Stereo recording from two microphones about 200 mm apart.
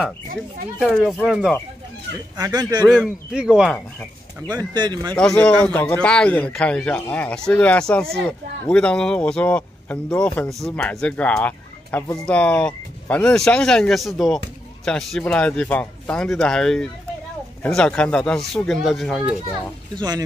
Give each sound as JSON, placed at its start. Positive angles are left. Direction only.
{"t": 0.7, "sound": "speech", "side_deg": 0}
{"t": 2.3, "sound": "speech", "side_deg": -20}
{"t": 2.8, "sound": "speech", "side_deg": 5}
{"t": 4.5, "sound": "speech", "side_deg": -20}
{"t": 5.1, "sound": "speech", "side_deg": 5}
{"t": 20.0, "sound": "speech", "side_deg": -20}